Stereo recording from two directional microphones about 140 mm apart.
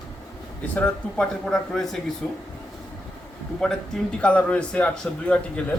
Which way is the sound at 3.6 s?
5° left (ahead or behind).